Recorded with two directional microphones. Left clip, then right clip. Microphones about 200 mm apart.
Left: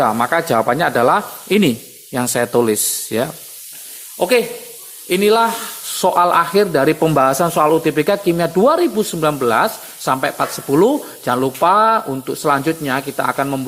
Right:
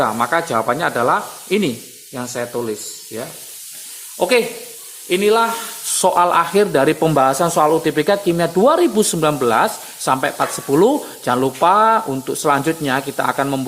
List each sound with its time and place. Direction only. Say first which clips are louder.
0.0 s speech: left 2 dB; 15° left (ahead or behind)
4.2 s speech: left 1 dB; 5° left (ahead or behind)
5.0 s speech: left 1 dB; 20° left (ahead or behind)